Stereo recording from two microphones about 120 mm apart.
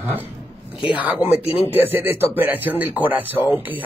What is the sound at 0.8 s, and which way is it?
Speech, 10° right (ahead or behind).